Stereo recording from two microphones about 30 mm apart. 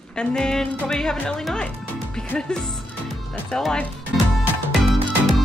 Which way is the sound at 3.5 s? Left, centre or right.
Left.